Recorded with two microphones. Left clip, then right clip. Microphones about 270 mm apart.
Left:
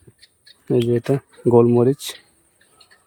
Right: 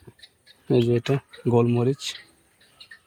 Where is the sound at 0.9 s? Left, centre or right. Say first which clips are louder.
Left 4 dB; centre.